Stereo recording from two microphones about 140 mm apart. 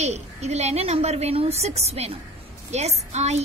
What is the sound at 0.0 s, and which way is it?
A woman's voice, 50° right (ahead or behind).